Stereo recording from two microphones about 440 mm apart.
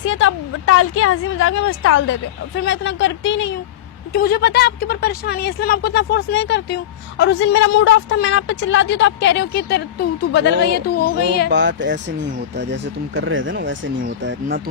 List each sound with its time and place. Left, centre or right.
0.0 s a woman's voice: left
11.5 s speech: right